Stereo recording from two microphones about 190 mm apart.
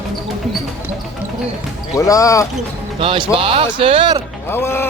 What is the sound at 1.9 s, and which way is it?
Speech, 15° left (ahead or behind).